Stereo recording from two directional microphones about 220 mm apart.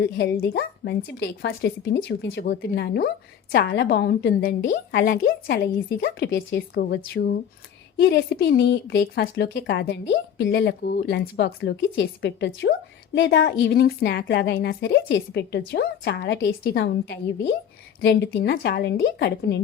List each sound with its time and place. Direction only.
0.5 s a woman's voice: 50° left (ahead or behind)